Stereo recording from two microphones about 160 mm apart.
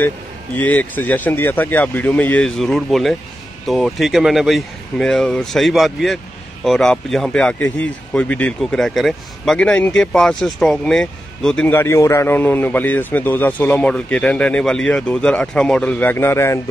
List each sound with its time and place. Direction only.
0.6 s speech: 10° left (ahead or behind)